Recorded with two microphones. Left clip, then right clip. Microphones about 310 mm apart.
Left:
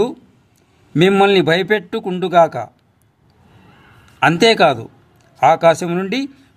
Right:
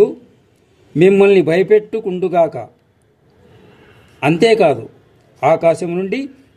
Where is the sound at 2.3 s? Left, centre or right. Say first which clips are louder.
Left 3 dB; left.